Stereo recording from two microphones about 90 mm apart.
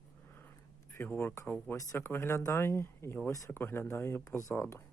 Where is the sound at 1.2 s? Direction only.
30° left (ahead or behind).